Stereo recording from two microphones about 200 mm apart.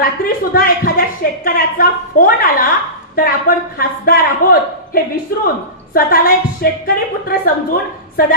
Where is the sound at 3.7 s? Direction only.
45° left (ahead or behind).